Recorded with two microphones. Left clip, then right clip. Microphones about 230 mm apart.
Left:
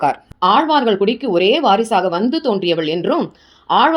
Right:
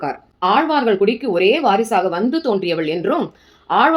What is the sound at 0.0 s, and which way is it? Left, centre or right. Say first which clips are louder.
Speech: left 5 dB; left.